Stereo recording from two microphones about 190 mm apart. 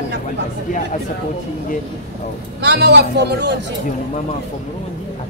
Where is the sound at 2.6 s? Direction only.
60° right (ahead or behind).